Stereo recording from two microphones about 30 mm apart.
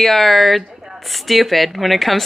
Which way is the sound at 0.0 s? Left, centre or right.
Centre.